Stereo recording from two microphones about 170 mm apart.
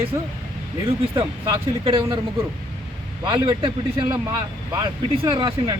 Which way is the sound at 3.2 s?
30° right (ahead or behind).